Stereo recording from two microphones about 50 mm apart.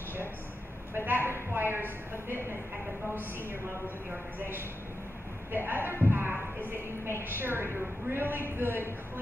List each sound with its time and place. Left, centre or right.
0.9 s a woman's voice: right
5.7 s a man's voice: right